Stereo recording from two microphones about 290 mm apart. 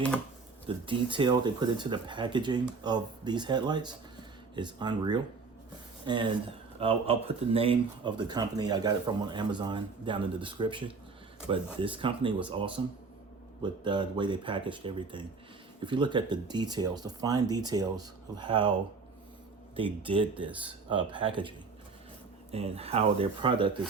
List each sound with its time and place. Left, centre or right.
0.9 s speech: centre
19.7 s speech: centre
22.5 s speech: right